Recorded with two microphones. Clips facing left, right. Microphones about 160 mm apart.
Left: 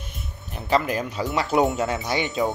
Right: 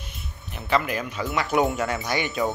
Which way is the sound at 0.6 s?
35° left (ahead or behind).